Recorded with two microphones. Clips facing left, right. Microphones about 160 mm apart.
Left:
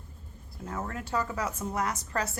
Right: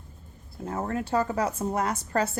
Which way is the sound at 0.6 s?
35° right (ahead or behind).